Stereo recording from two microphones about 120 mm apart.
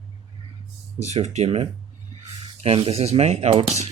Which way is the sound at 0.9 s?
70° right (ahead or behind).